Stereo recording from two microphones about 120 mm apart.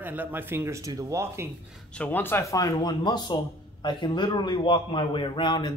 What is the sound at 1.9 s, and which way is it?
A man's voice, 15° left (ahead or behind).